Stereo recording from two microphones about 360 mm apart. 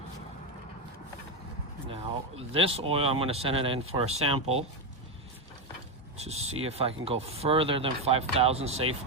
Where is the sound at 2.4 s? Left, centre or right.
Centre.